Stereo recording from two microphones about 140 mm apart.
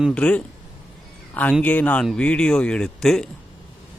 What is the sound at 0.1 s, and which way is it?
A man's voice, 10° left (ahead or behind).